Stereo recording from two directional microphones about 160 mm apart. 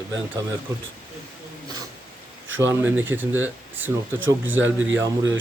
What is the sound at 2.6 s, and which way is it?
Speech, 15° right (ahead or behind).